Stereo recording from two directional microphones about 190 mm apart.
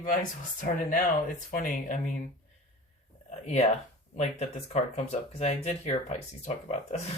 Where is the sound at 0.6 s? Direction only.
45° left (ahead or behind).